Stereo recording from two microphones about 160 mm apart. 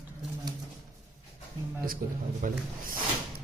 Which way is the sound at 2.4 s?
55° right (ahead or behind).